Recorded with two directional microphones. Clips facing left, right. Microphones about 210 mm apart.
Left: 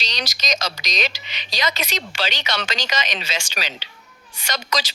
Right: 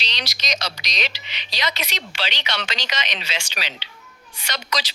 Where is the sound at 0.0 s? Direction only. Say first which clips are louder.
Left 3 dB; 45° left (ahead or behind).